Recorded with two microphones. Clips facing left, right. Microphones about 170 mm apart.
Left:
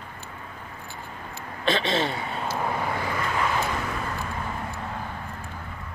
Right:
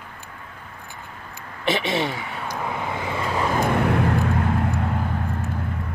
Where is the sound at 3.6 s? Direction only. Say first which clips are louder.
Right 9 dB; 60° right (ahead or behind).